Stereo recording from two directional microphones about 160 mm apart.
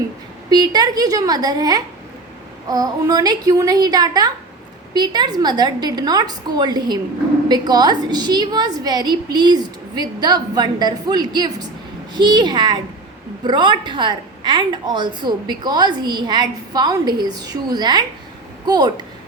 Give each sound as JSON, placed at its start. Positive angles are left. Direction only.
{"t": 0.5, "sound": "a woman's voice", "side_deg": -25}